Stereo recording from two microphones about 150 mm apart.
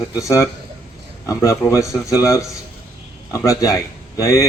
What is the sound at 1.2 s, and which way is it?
A man's voice, 20° left (ahead or behind).